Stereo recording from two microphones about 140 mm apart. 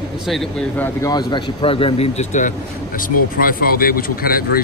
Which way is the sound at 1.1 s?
30° left (ahead or behind).